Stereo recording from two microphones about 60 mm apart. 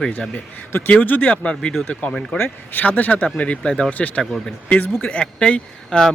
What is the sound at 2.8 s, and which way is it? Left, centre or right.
Speech, left.